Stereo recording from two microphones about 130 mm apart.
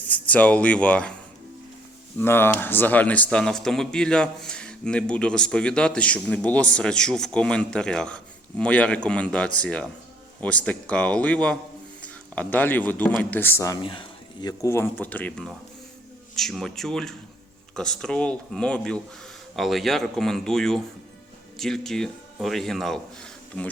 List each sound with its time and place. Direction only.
0.0 s speech: 10° left (ahead or behind)
13.8 s speech: 40° left (ahead or behind)
14.6 s speech: 20° left (ahead or behind); by 23.6 s 5° left (ahead or behind)